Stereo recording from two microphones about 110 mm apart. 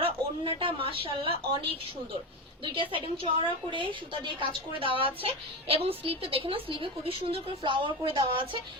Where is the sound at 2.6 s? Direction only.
50° right (ahead or behind).